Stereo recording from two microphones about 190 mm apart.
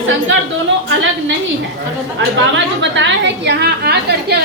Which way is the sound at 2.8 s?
70° right (ahead or behind).